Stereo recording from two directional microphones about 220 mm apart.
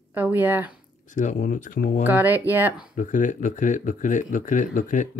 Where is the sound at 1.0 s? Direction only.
35° left (ahead or behind).